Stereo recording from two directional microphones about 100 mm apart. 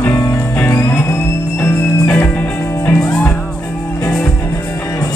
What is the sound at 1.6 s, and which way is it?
Music, 20° left (ahead or behind).